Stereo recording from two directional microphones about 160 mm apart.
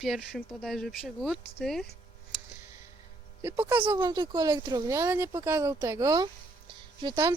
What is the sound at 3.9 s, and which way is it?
Speech, 25° right (ahead or behind).